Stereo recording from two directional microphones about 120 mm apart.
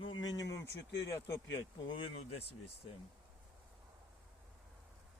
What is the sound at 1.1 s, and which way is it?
Speech, 20° left (ahead or behind).